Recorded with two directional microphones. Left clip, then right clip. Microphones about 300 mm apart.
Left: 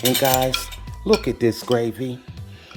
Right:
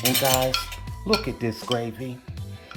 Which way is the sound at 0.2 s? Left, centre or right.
Left.